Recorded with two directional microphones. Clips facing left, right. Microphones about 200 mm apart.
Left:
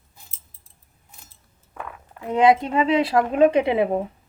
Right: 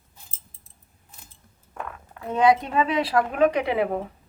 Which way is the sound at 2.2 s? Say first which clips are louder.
Left 2 dB; 20° left (ahead or behind).